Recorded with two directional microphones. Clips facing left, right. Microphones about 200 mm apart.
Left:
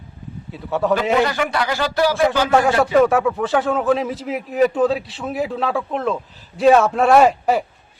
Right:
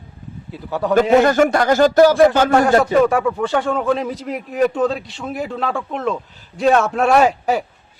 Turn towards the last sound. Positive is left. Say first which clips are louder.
# left 1 dB
turn(degrees=0)  # may be behind; listen again after turning